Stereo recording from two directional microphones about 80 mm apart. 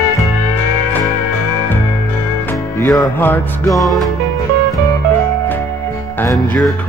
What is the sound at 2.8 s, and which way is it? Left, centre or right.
Music, left.